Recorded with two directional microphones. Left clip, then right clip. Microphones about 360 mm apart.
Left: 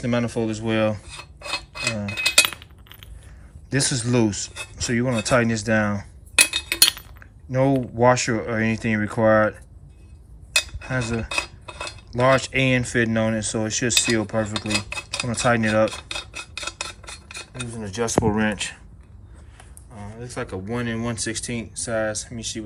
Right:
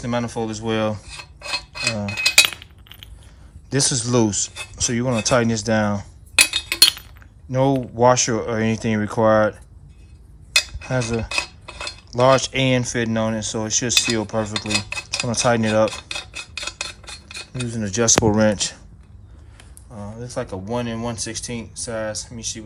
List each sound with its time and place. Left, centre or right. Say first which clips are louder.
0.0 s filing: even; centre
3.7 s speech: right 3 dB; centre
10.5 s cutlery: right 3 dB; centre
18.3 s speech: right 6 dB; centre
20.1 s speech: right 2 dB; centre